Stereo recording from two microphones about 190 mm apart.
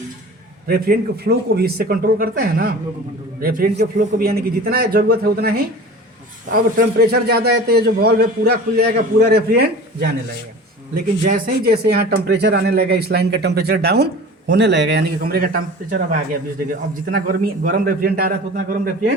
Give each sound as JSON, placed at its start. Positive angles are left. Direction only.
{"t": 0.7, "sound": "a man's voice", "side_deg": -55}
{"t": 10.9, "sound": "speech", "side_deg": -45}
{"t": 17.1, "sound": "a man's voice", "side_deg": -50}